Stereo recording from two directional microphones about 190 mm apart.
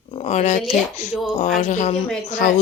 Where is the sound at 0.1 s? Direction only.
35° left (ahead or behind).